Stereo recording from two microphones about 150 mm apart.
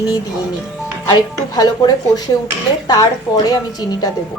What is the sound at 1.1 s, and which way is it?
Speech, 25° left (ahead or behind).